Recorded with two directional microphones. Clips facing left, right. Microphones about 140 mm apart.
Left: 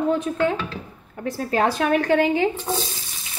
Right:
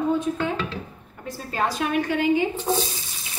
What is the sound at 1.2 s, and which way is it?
Speech, 65° left (ahead or behind).